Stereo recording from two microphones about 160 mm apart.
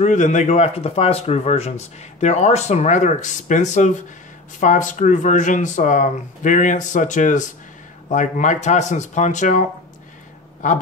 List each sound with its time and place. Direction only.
0.0 s speech: 50° left (ahead or behind)